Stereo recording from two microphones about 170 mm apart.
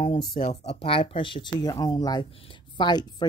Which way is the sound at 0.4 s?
40° left (ahead or behind).